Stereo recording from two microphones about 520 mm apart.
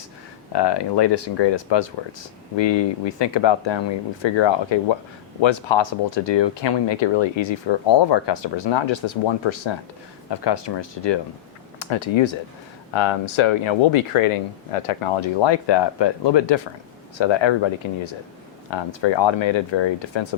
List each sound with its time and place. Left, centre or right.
0.5 s speech: left